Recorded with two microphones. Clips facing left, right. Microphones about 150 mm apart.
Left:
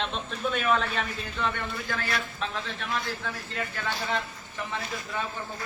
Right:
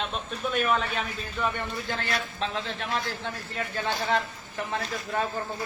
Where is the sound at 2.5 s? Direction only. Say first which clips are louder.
Right 2 dB; 35° right (ahead or behind).